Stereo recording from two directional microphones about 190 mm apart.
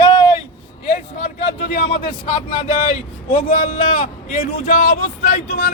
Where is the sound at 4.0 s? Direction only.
50° left (ahead or behind).